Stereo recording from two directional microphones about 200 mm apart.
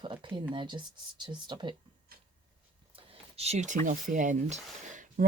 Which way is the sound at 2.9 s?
30° right (ahead or behind).